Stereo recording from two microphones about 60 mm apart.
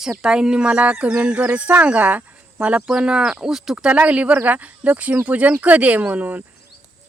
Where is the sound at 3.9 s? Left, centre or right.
Right.